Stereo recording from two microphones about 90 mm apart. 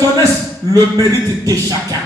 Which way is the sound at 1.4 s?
40° right (ahead or behind).